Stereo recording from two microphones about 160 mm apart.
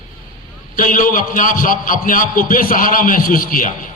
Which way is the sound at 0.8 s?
60° left (ahead or behind).